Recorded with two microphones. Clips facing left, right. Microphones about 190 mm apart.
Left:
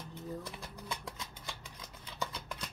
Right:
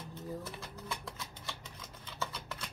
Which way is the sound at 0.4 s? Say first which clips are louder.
Right 1 dB; 15° left (ahead or behind).